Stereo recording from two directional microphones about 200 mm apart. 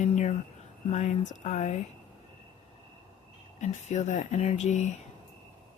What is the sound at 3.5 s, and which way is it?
Speech, 35° left (ahead or behind).